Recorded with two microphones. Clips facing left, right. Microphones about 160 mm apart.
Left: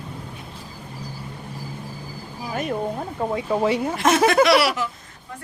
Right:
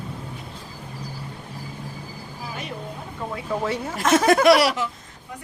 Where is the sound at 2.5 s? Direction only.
50° left (ahead or behind).